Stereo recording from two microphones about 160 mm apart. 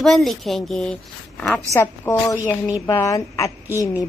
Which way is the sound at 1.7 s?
20° left (ahead or behind).